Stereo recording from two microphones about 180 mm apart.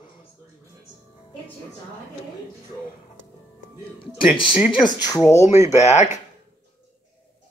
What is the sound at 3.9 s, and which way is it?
Snicker, 30° left (ahead or behind).